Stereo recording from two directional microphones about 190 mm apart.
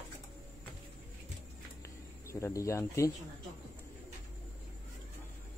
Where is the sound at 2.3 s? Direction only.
15° left (ahead or behind).